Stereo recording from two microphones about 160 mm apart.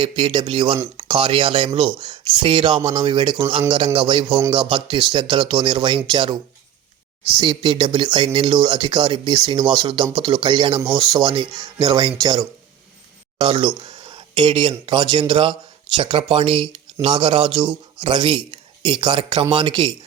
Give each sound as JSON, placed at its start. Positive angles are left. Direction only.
{"t": 0.0, "sound": "speech", "side_deg": -30}
{"t": 7.3, "sound": "speech", "side_deg": -30}